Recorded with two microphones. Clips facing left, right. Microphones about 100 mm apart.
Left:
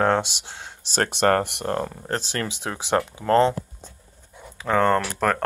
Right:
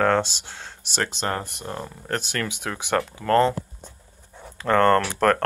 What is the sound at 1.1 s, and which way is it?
Speech, 60° left (ahead or behind).